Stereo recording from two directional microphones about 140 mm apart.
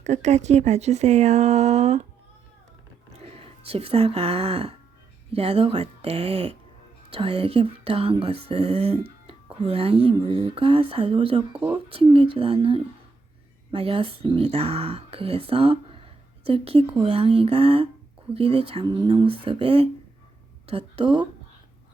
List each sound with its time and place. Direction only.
0.0 s speech: 55° right (ahead or behind)
3.2 s speech: 45° right (ahead or behind)
11.5 s speech: 10° right (ahead or behind)
11.9 s speech: 40° right (ahead or behind)